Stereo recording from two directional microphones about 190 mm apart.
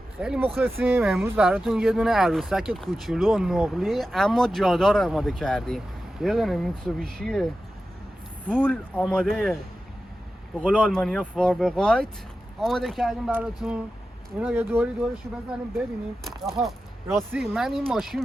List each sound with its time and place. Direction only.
0.2 s speech: 5° right (ahead or behind)
8.4 s speech: 5° left (ahead or behind)
10.7 s speech: 5° left (ahead or behind)
16.2 s speech: centre (ahead or behind)